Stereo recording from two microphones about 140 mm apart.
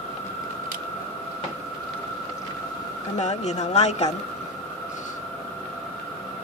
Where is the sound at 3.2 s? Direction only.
55° left (ahead or behind).